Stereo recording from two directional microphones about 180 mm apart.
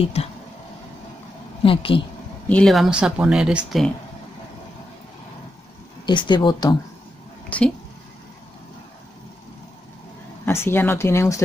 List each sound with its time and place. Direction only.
0.0 s speech: 35° left (ahead or behind)
1.6 s speech: 30° left (ahead or behind)
2.4 s speech: 5° left (ahead or behind)
6.0 s speech: 25° left (ahead or behind)
7.4 s speech: 5° left (ahead or behind)
10.4 s speech: 15° left (ahead or behind)